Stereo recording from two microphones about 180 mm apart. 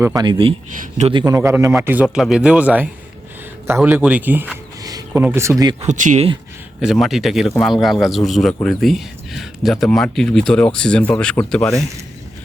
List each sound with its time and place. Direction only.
0.0 s speech: 20° right (ahead or behind)
1.2 s speech: 15° right (ahead or behind)
4.8 s a sound: 20° right (ahead or behind)
5.2 s speech: 15° right (ahead or behind)
5.8 s speech: 45° right (ahead or behind)
6.8 s speech: centre (ahead or behind)